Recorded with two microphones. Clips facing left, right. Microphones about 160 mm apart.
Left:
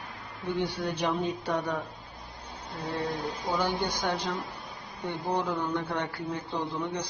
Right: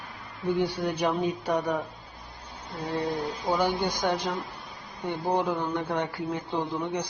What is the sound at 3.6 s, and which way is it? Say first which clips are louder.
A man's voice: right 3 dB; 15° right (ahead or behind).